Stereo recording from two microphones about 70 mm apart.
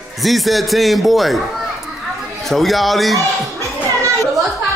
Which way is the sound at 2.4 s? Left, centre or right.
Centre.